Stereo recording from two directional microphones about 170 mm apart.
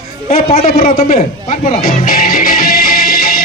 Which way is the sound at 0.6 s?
60° left (ahead or behind).